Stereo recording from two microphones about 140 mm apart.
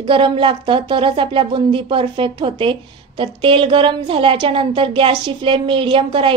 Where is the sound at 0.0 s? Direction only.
40° right (ahead or behind).